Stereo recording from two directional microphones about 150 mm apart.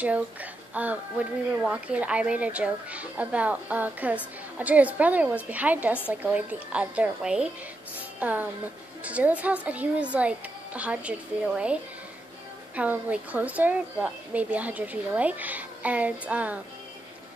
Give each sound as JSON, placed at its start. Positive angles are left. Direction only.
{"t": 0.0, "sound": "a woman's voice", "side_deg": -10}